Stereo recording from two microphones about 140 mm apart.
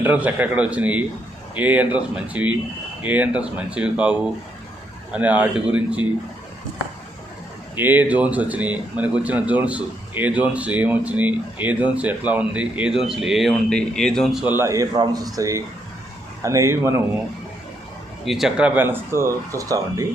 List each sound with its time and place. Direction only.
0.0 s speech: 10° right (ahead or behind)
7.8 s speech: 15° right (ahead or behind); by 14.4 s centre (ahead or behind)
14.4 s speech: 15° right (ahead or behind)
18.3 s speech: 5° right (ahead or behind); by 20.1 s 25° right (ahead or behind)